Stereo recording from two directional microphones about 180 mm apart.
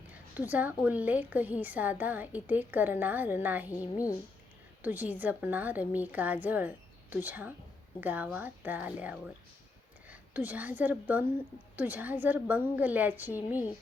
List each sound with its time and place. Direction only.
0.3 s a woman's voice: 10° right (ahead or behind)
3.8 s a woman's voice: 20° left (ahead or behind)
4.8 s a woman's voice: 10° right (ahead or behind)